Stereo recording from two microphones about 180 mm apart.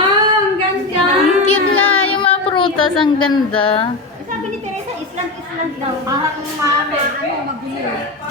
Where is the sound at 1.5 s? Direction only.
35° left (ahead or behind).